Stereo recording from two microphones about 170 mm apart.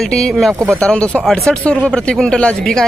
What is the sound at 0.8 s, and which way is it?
Speech, 5° left (ahead or behind).